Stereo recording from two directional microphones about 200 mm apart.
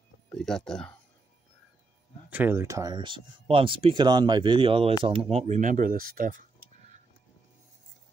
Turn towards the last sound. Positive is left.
turn(degrees=-45)  # may be behind; listen again after turning